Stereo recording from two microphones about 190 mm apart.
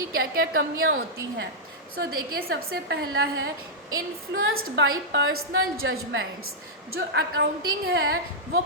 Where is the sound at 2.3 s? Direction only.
55° right (ahead or behind).